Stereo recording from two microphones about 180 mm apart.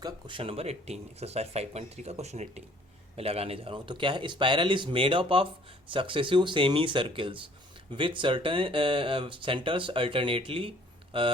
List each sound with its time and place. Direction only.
0.0 s speech: 30° right (ahead or behind)